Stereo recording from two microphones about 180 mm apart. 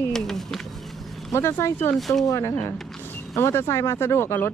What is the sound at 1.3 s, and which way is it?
Speech, 15° left (ahead or behind).